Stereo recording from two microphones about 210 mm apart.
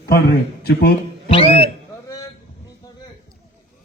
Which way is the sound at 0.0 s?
50° left (ahead or behind).